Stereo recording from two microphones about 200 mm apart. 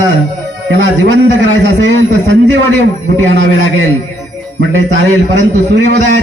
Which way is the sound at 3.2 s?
65° right (ahead or behind).